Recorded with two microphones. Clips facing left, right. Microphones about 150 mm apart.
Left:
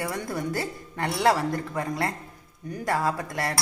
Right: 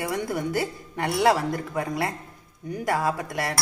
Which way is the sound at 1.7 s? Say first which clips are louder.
Right 1 dB; 15° right (ahead or behind).